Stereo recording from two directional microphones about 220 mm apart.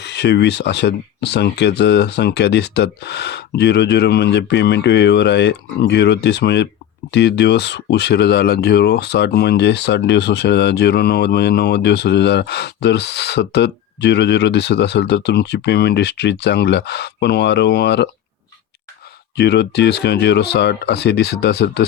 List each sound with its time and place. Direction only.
0.0 s speech: 50° left (ahead or behind)
19.4 s speech: 50° left (ahead or behind)